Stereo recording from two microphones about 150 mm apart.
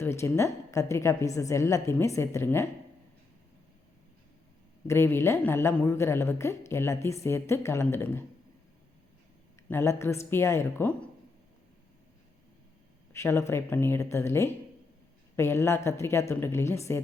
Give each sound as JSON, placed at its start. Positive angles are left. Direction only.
{"t": 0.0, "sound": "a woman's voice", "side_deg": 15}
{"t": 4.9, "sound": "a woman's voice", "side_deg": 15}
{"t": 9.6, "sound": "a woman's voice", "side_deg": 15}
{"t": 13.1, "sound": "a woman's voice", "side_deg": 20}